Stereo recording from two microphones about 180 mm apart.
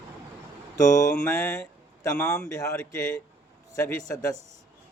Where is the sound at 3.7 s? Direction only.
20° left (ahead or behind).